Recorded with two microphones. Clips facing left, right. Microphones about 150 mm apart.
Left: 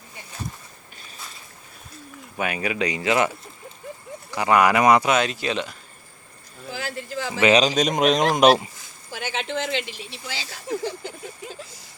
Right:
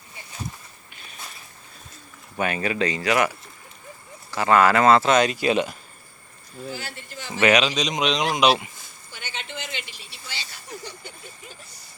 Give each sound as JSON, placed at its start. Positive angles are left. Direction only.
{"t": 2.4, "sound": "speech", "side_deg": 10}
{"t": 5.1, "sound": "speech", "side_deg": 0}
{"t": 6.7, "sound": "speech", "side_deg": 90}
{"t": 7.5, "sound": "speech", "side_deg": 45}
{"t": 9.1, "sound": "speech", "side_deg": 90}